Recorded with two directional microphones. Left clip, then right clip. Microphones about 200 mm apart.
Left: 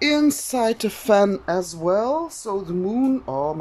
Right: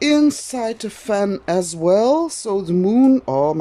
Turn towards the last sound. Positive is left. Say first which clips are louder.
# right 7 dB
turn(degrees=-25)  # may be behind; listen again after turning